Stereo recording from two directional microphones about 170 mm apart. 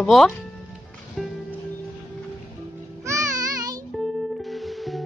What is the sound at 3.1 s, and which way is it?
Music, 20° right (ahead or behind).